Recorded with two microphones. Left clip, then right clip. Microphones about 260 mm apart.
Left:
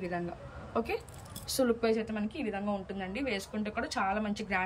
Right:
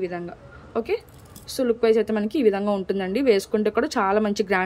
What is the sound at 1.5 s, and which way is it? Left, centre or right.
A woman's voice, centre.